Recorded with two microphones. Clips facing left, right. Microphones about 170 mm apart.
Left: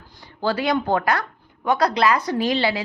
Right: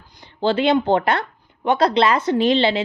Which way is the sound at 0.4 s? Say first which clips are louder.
Right 4 dB; 25° right (ahead or behind).